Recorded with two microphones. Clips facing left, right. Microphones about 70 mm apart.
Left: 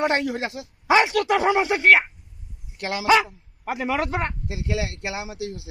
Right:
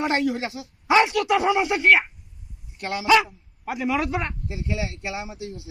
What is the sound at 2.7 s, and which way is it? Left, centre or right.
Speech, left.